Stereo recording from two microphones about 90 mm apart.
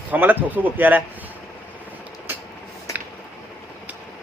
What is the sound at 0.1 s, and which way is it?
Speech, 20° right (ahead or behind).